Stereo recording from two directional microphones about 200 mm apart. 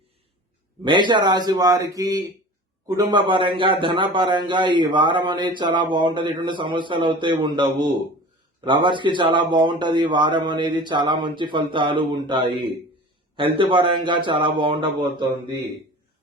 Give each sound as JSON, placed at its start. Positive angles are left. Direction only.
{"t": 0.9, "sound": "a man's voice", "side_deg": -25}
{"t": 13.6, "sound": "a man's voice", "side_deg": -25}